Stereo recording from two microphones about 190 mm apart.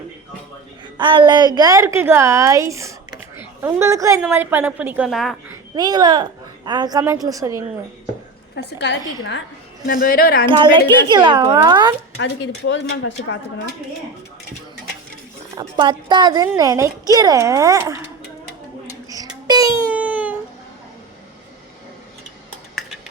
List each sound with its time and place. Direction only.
0.9 s a woman's voice: 25° right (ahead or behind); by 5.4 s centre (ahead or behind)
5.7 s a woman's voice: 20° right (ahead or behind)
8.5 s a woman's voice: 65° left (ahead or behind)
9.8 s a woman's voice: 50° left (ahead or behind)
10.5 s a woman's voice: 25° right (ahead or behind)
12.2 s speech: 65° left (ahead or behind); by 13.1 s 85° left
15.5 s a woman's voice: 25° right (ahead or behind)
19.0 s child singing: 20° right (ahead or behind)
19.9 s baby cry: 5° right (ahead or behind)